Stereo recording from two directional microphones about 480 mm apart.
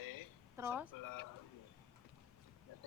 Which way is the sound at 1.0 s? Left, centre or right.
Left.